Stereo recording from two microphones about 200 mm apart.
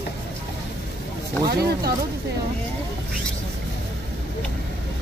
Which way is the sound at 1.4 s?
55° right (ahead or behind).